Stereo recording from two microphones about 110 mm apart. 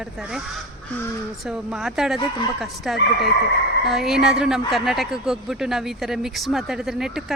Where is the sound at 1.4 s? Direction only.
5° right (ahead or behind).